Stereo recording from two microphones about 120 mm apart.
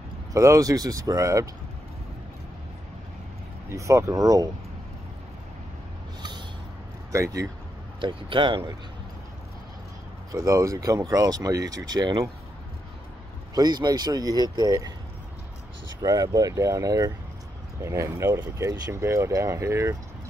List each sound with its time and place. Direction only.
0.3 s speech: 25° right (ahead or behind)
3.7 s speech: 25° right (ahead or behind)
7.1 s speech: 25° right (ahead or behind)
8.0 s speech: 45° right (ahead or behind)
10.3 s speech: 30° right (ahead or behind)
13.6 s speech: 35° right (ahead or behind)
16.0 s speech: 30° right (ahead or behind)